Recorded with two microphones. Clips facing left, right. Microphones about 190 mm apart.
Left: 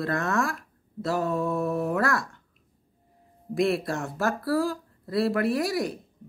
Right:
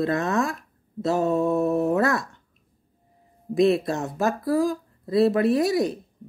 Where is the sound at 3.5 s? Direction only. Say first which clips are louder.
Right 5 dB; 20° right (ahead or behind).